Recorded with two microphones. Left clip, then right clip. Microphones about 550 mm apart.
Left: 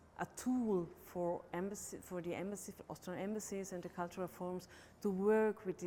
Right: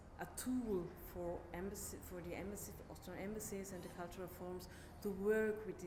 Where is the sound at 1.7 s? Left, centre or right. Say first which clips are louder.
Left 3 dB; left.